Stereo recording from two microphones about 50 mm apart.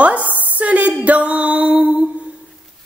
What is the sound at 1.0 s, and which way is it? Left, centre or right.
Music, right.